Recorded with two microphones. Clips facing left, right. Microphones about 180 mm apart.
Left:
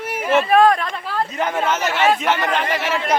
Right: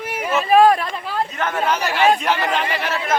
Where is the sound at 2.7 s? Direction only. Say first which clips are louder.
Left 1 dB; 15° left (ahead or behind).